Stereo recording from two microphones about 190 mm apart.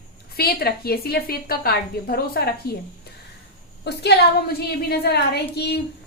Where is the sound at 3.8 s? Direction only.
60° left (ahead or behind).